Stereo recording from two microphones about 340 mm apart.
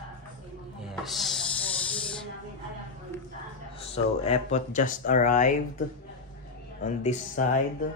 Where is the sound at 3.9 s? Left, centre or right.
Centre.